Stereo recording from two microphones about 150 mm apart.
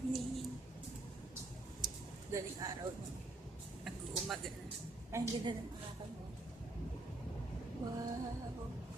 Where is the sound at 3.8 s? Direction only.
Centre (ahead or behind).